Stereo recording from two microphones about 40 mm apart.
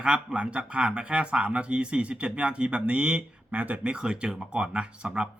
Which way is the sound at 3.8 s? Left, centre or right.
Right.